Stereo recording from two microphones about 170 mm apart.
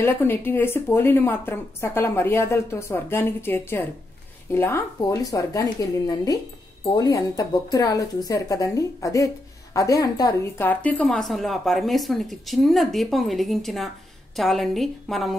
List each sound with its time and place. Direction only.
0.0 s a woman's voice: 15° left (ahead or behind)